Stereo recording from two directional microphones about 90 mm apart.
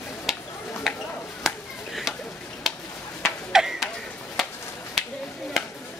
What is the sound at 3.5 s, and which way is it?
Tick-tock, 5° right (ahead or behind).